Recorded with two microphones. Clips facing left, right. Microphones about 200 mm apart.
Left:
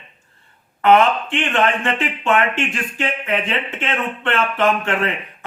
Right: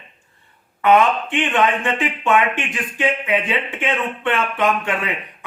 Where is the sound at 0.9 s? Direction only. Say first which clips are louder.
Left 1 dB; 15° right (ahead or behind).